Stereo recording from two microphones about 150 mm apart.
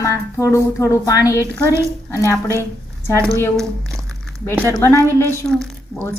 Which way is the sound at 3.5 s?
5° left (ahead or behind).